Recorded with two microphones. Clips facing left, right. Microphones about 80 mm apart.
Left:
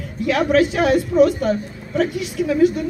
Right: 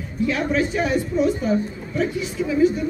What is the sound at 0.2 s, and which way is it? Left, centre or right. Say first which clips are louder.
A woman's voice: left 5 dB; left.